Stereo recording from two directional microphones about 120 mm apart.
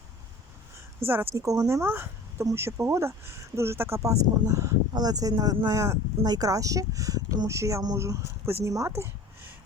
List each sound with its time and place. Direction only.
0.9 s speech: 15° right (ahead or behind)